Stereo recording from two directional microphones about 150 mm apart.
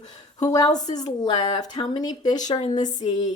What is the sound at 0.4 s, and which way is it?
Speech, 25° left (ahead or behind).